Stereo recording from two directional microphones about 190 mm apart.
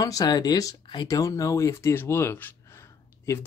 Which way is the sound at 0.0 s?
20° left (ahead or behind).